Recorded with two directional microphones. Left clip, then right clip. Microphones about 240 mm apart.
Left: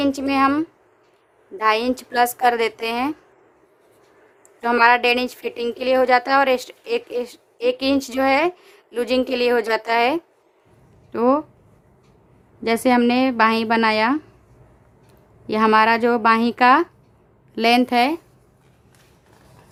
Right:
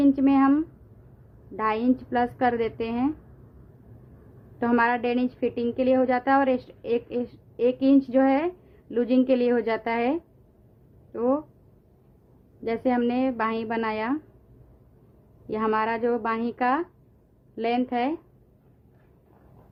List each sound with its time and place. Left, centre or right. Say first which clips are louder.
0.0 s speech: left 2 dB; left
4.7 s speech: left 9 dB; left
12.6 s speech: left 8 dB; left
15.4 s speech: left 10 dB; left